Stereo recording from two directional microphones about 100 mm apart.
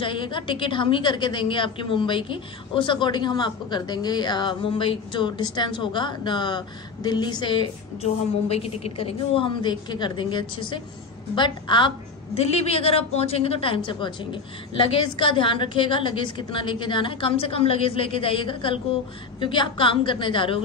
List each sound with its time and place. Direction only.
0.0 s a woman's voice: 55° left (ahead or behind)
8.0 s a woman's voice: 90° left; by 11.9 s 55° left (ahead or behind)
12.4 s a woman's voice: 90° left; by 20.6 s 60° left (ahead or behind)